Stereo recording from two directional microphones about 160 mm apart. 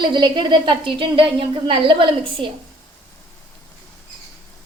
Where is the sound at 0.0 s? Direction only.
30° right (ahead or behind).